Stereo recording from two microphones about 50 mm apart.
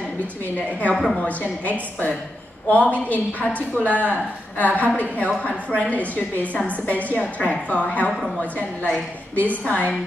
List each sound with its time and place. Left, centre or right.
0.6 s a woman's voice: left